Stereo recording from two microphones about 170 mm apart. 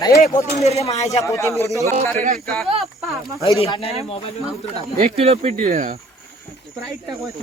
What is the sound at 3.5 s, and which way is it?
Speech, 35° left (ahead or behind).